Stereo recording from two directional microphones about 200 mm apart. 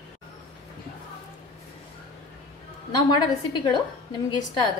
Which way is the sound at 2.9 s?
20° left (ahead or behind).